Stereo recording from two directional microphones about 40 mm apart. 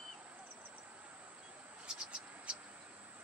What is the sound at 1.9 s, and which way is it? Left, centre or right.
Scratch, right.